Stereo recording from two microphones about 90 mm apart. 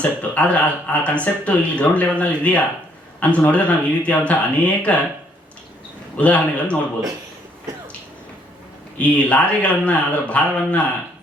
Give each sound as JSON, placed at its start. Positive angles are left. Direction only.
{"t": 0.0, "sound": "speech", "side_deg": 15}
{"t": 6.1, "sound": "speech", "side_deg": 15}
{"t": 9.0, "sound": "speech", "side_deg": 15}